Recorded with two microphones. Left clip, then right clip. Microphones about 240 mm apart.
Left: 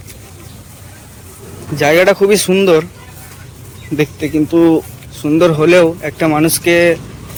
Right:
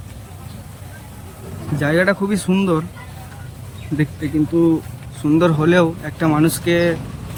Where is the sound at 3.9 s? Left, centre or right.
Centre.